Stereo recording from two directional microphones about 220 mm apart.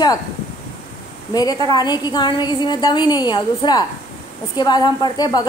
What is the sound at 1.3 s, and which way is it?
A woman's voice, 15° left (ahead or behind).